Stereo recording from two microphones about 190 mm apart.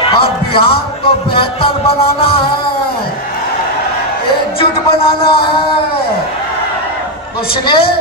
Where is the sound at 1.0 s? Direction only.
25° left (ahead or behind).